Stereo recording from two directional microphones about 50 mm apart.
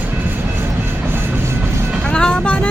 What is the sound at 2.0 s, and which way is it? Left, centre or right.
Vehicle, left.